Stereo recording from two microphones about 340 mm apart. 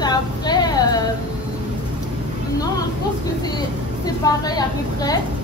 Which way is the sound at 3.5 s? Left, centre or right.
Centre.